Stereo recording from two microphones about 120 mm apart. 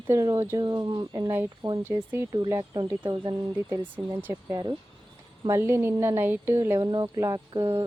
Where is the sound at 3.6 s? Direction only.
20° right (ahead or behind).